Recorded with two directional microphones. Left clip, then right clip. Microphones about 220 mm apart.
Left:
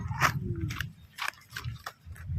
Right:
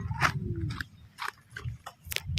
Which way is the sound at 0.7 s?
40° left (ahead or behind).